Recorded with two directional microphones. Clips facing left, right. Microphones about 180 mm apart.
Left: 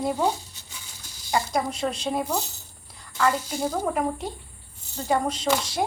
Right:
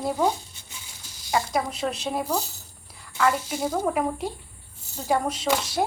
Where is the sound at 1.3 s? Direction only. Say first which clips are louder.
Even; 5° right (ahead or behind).